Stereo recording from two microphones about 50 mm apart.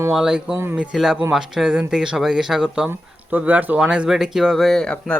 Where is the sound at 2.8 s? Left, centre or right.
Right.